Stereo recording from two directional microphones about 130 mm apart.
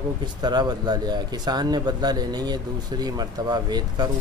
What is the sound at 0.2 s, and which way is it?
Speech, 35° right (ahead or behind).